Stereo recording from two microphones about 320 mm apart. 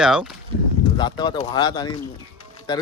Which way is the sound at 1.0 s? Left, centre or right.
Centre.